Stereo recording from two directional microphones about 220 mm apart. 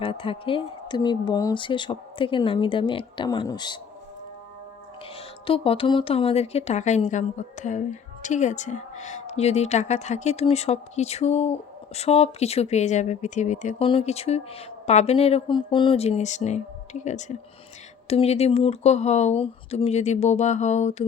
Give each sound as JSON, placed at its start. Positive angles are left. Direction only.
{"t": 0.0, "sound": "speech", "side_deg": 25}
{"t": 5.1, "sound": "speech", "side_deg": 25}